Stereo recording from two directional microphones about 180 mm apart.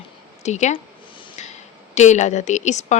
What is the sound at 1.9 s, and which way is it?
Speech, 40° left (ahead or behind).